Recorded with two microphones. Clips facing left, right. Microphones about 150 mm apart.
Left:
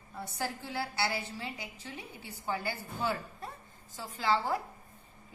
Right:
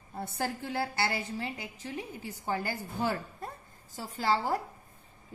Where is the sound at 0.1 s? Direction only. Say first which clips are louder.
Right 3 dB; 50° right (ahead or behind).